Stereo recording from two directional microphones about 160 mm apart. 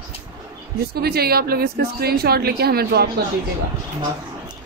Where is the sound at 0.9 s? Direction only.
75° right (ahead or behind).